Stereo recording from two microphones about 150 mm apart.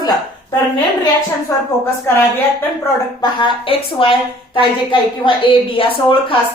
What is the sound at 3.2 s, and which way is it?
A woman's voice, 35° left (ahead or behind).